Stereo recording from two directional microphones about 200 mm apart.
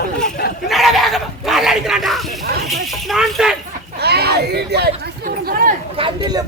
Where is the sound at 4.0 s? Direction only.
55° right (ahead or behind).